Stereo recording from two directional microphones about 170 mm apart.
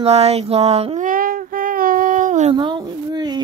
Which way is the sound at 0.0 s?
35° right (ahead or behind).